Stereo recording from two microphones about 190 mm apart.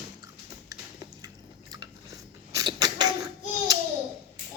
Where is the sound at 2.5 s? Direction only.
20° right (ahead or behind).